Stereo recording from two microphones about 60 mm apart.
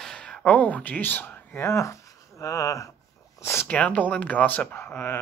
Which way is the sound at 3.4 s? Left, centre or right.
Left.